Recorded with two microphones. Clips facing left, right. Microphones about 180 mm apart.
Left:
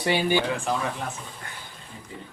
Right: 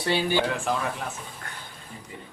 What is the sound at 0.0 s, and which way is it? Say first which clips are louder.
Speech: left 1 dB; 15° left (ahead or behind).